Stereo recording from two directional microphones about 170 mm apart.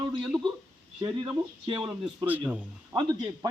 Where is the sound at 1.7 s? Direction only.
30° right (ahead or behind).